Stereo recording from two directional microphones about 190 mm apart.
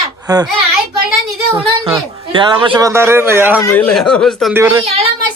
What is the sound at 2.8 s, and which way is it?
Speech, 15° right (ahead or behind).